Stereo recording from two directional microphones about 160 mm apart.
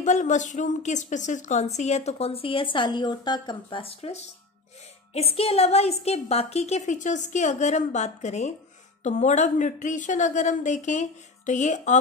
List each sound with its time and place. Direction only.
0.0 s a woman's voice: 50° left (ahead or behind)